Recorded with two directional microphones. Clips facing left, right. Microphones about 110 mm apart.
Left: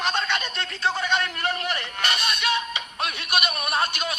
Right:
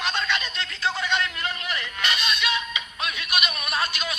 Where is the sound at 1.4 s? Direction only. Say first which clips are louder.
Left 4 dB; 50° left (ahead or behind).